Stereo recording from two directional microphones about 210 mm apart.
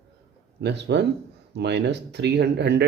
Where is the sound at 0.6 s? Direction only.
55° right (ahead or behind).